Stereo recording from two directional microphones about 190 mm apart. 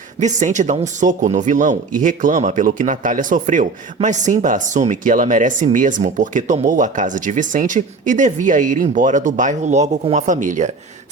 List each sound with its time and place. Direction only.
0.2 s speech: 40° right (ahead or behind)